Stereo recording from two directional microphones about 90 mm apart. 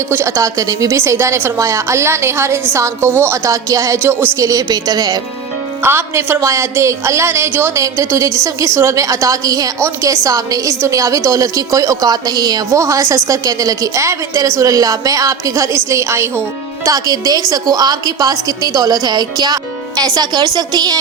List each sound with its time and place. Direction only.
0.1 s a woman's voice: 30° right (ahead or behind)
3.9 s speech: 25° right (ahead or behind)
4.4 s a woman's voice: 40° right (ahead or behind)
5.8 s a woman's voice: 25° right (ahead or behind)
16.8 s a woman's voice: 40° right (ahead or behind)